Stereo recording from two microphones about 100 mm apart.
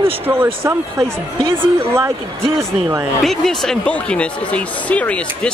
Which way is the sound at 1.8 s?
25° right (ahead or behind).